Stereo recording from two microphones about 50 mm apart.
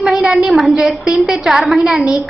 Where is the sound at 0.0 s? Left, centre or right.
Centre.